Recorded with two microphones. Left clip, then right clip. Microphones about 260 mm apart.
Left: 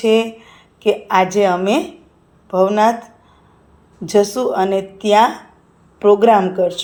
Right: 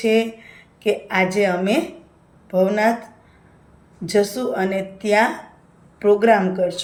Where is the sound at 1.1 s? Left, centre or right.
Centre.